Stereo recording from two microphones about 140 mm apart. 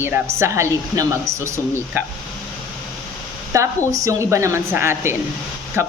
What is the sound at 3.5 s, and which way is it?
A woman's voice, 20° right (ahead or behind).